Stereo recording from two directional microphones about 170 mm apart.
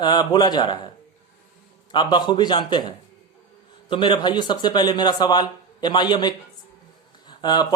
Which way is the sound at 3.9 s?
30° left (ahead or behind).